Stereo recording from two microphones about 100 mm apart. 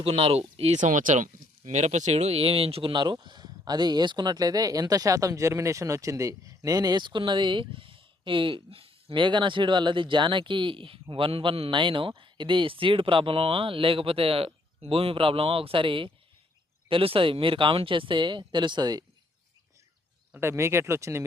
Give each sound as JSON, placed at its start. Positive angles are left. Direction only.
{"t": 0.0, "sound": "speech", "side_deg": -80}
{"t": 1.9, "sound": "speech", "side_deg": -90}
{"t": 2.9, "sound": "speech", "side_deg": -50}
{"t": 20.3, "sound": "speech", "side_deg": -25}